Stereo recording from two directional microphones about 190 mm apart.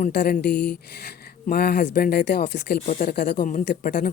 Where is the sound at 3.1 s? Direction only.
60° left (ahead or behind).